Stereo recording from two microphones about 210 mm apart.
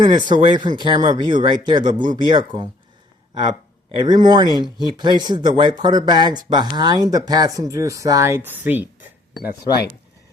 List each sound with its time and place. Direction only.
0.0 s speech: 20° right (ahead or behind)
3.9 s speech: 20° right (ahead or behind)